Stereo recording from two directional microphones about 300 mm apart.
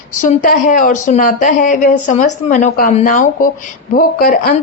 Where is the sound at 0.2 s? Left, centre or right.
Left.